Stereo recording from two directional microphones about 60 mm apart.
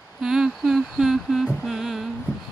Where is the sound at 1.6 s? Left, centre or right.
Centre.